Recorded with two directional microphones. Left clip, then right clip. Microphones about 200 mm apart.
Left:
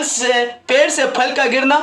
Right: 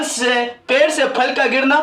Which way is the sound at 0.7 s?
25° left (ahead or behind).